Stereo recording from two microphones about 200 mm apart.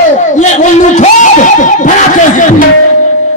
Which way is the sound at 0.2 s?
40° left (ahead or behind).